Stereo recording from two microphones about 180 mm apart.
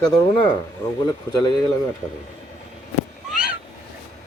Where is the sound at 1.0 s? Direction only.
20° left (ahead or behind).